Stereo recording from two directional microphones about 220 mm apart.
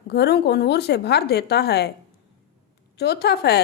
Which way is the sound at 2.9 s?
50° left (ahead or behind).